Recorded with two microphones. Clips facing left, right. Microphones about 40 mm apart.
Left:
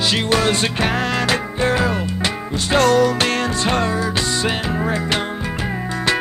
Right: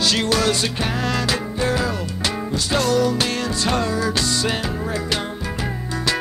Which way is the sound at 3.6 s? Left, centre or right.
Left.